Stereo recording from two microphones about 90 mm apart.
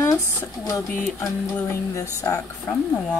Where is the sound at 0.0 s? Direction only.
30° left (ahead or behind).